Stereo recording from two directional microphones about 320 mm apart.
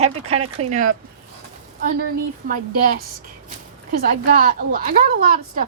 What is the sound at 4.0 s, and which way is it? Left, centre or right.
Speech, right.